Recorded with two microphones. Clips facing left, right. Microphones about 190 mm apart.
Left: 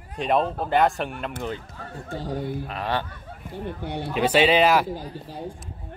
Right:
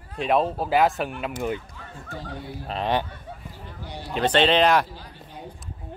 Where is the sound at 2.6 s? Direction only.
20° right (ahead or behind).